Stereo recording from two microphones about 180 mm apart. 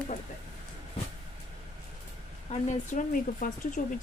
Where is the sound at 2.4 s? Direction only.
45° left (ahead or behind).